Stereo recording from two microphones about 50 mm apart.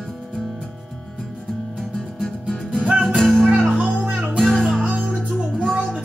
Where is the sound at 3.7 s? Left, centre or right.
Right.